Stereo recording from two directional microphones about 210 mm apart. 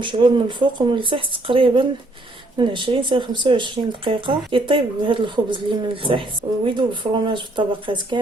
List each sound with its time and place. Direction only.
0.0 s speech: 20° right (ahead or behind)